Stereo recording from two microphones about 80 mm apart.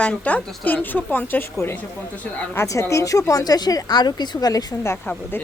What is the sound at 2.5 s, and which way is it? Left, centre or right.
Speech, left.